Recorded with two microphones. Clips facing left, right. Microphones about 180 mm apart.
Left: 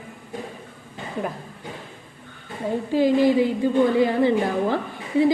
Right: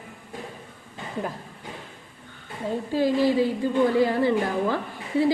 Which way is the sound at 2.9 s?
15° left (ahead or behind).